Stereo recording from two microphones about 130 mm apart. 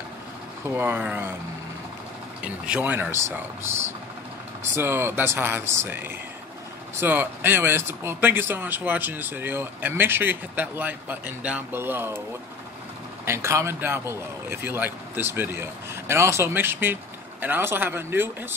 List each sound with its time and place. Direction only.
0.7 s a man's voice: 15° right (ahead or behind)
2.4 s a man's voice: 10° right (ahead or behind)
4.7 s a man's voice: 20° right (ahead or behind)
13.2 s a man's voice: 20° right (ahead or behind)